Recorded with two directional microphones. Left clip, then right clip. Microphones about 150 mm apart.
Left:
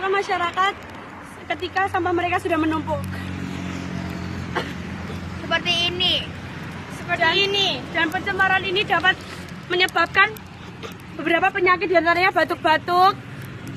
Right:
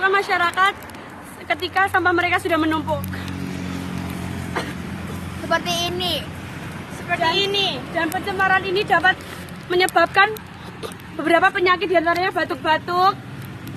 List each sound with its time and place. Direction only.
0.0 s speech: centre (ahead or behind)
5.5 s speech: 40° right (ahead or behind)
7.3 s speech: 30° left (ahead or behind)
7.9 s speech: 20° right (ahead or behind)
8.3 s speech: 50° right (ahead or behind)
10.8 s speech: 35° right (ahead or behind)
12.0 s speech: 35° left (ahead or behind)